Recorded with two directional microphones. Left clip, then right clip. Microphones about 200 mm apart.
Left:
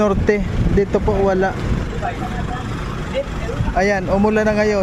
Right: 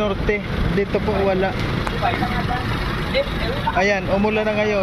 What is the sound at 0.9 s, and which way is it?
Speech, 35° left (ahead or behind).